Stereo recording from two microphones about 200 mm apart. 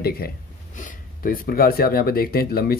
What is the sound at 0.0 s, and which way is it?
Speech, 50° left (ahead or behind).